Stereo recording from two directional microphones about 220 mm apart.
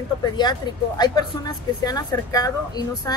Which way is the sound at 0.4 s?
20° left (ahead or behind).